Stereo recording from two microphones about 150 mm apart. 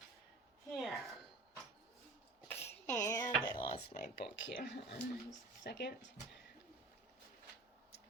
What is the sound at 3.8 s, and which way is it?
Speech, 80° left.